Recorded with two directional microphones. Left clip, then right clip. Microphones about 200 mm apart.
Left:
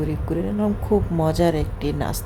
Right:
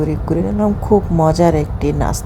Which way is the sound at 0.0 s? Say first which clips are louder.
Right 7 dB; 10° right (ahead or behind).